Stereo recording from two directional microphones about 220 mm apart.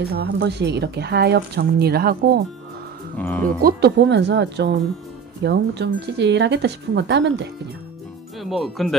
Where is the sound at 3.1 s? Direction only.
5° left (ahead or behind).